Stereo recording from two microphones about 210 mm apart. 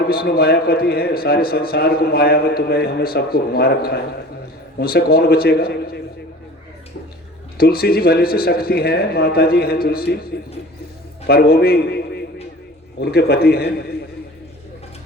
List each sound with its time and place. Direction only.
0.1 s a man's voice: 45° left (ahead or behind)
7.6 s a man's voice: 45° left (ahead or behind)